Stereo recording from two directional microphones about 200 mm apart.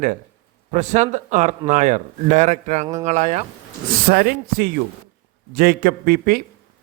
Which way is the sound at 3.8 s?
50° right (ahead or behind).